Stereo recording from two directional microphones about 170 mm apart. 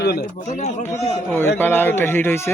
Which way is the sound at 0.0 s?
70° left (ahead or behind).